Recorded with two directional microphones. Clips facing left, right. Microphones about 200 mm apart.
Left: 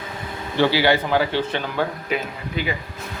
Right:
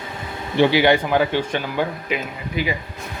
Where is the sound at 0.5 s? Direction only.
15° right (ahead or behind).